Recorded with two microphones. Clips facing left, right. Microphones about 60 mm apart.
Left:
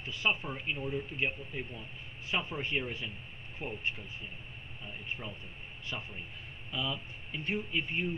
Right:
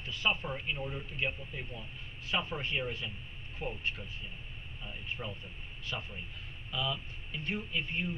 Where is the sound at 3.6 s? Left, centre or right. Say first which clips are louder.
Right 1 dB; centre.